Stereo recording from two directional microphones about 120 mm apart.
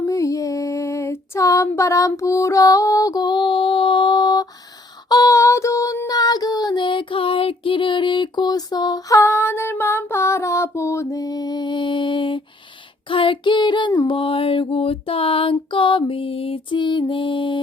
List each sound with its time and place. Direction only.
0.0 s music: 25° left (ahead or behind); by 12.4 s 45° left (ahead or behind)
13.1 s child singing: 45° left (ahead or behind)
14.1 s music: 50° left (ahead or behind)